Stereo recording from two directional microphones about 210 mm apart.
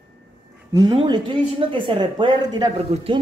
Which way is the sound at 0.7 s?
20° right (ahead or behind).